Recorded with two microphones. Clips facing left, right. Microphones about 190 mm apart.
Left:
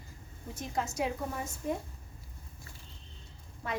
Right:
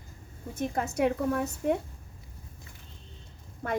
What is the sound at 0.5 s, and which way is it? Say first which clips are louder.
A woman's voice: right 5 dB; 55° right (ahead or behind).